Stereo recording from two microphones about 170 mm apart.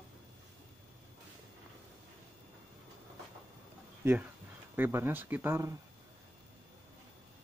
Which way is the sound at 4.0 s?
10° right (ahead or behind).